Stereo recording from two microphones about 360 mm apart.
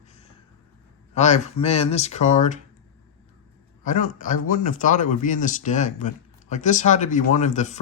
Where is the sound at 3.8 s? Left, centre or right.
Left.